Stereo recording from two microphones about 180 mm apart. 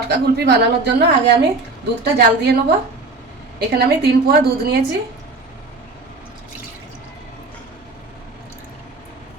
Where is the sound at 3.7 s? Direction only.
60° right (ahead or behind).